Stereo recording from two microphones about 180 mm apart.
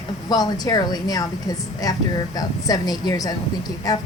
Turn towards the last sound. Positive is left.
turn(degrees=20)  # may be behind; listen again after turning